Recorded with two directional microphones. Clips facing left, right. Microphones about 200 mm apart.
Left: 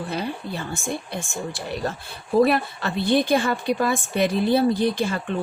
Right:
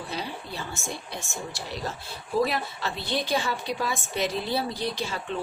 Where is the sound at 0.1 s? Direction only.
55° left (ahead or behind).